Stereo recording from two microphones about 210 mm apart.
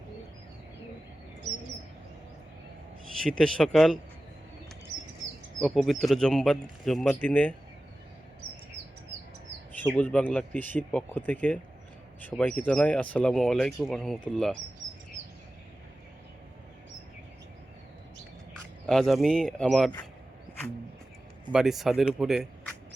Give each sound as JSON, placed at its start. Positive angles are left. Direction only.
{"t": 3.2, "sound": "speech", "side_deg": 5}
{"t": 5.6, "sound": "speech", "side_deg": 0}
{"t": 9.7, "sound": "speech", "side_deg": 5}
{"t": 18.9, "sound": "speech", "side_deg": 0}
{"t": 21.5, "sound": "speech", "side_deg": 0}